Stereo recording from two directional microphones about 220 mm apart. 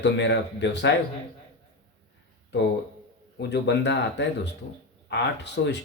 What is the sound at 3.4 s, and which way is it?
Speech, 50° left (ahead or behind).